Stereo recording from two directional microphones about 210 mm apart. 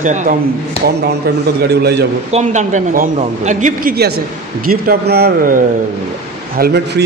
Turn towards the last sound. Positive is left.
turn(degrees=-50)  # may be behind; listen again after turning